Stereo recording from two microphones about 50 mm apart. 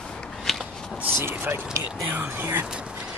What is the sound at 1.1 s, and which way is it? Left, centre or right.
Speech, right.